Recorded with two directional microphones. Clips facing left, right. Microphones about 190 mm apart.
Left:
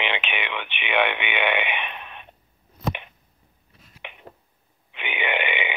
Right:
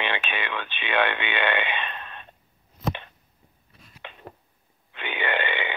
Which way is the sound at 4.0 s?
20° left (ahead or behind).